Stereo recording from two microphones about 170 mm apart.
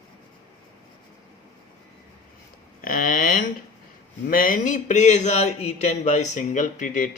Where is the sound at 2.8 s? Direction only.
55° left (ahead or behind).